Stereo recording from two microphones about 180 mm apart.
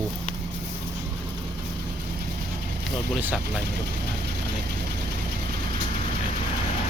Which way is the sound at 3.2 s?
10° right (ahead or behind).